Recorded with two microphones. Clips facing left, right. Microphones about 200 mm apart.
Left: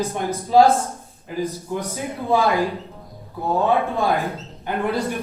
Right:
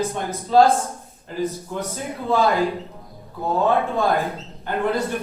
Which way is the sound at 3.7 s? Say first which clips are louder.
Even; 15° left (ahead or behind).